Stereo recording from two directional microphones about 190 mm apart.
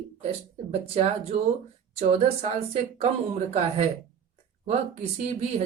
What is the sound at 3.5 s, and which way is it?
Speech, 35° right (ahead or behind).